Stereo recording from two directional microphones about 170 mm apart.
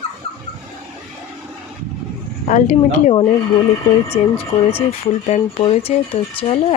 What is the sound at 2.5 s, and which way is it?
Speech, 45° left (ahead or behind).